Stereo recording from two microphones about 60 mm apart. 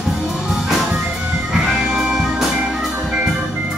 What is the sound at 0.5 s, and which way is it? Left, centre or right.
Music, centre.